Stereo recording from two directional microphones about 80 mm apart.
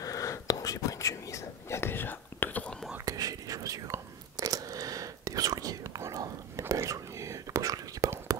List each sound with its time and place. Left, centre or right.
0.0 s whispering: left
3.1 s whispering: right